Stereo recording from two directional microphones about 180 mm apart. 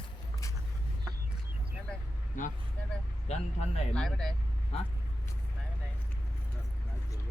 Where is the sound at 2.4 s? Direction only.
45° left (ahead or behind).